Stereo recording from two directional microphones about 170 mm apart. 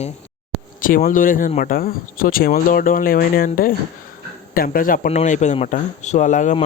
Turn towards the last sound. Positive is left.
turn(degrees=45)  # may be behind; listen again after turning